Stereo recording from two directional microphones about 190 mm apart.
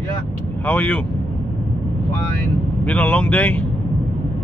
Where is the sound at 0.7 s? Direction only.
10° left (ahead or behind).